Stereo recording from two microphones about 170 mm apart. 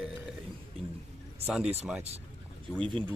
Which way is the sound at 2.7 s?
5° left (ahead or behind).